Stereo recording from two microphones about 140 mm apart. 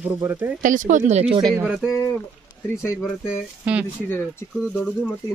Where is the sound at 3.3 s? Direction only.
10° right (ahead or behind).